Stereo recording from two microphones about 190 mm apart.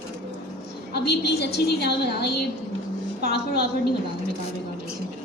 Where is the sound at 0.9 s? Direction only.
60° left (ahead or behind).